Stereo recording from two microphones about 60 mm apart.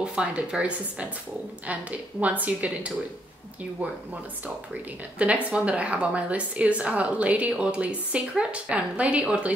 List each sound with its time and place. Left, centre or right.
0.0 s a woman's voice: centre
5.2 s a woman's voice: right